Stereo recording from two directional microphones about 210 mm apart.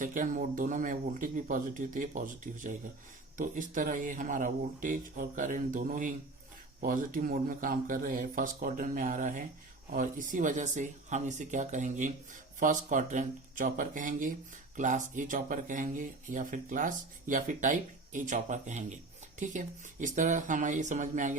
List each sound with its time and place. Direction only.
0.0 s speech: 40° right (ahead or behind)